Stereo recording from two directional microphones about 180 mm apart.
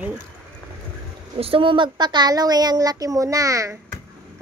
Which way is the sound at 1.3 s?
30° right (ahead or behind).